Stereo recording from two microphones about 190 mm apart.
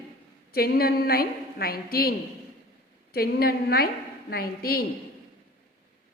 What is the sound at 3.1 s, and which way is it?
A woman's voice, 55° left (ahead or behind).